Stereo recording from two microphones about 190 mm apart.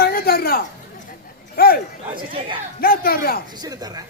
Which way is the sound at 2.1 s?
25° right (ahead or behind).